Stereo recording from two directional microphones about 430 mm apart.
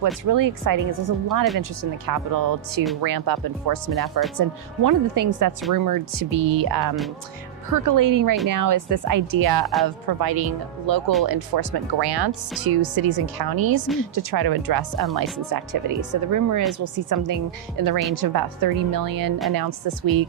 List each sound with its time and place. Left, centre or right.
0.3 s speech: right